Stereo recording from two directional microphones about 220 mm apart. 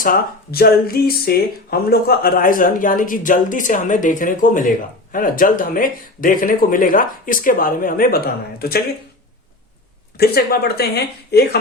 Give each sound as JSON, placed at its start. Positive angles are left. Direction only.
{"t": 0.0, "sound": "speech", "side_deg": 40}
{"t": 10.2, "sound": "speech", "side_deg": 45}